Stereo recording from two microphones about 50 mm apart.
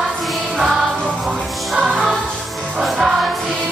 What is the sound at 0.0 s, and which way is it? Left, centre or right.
Music, centre.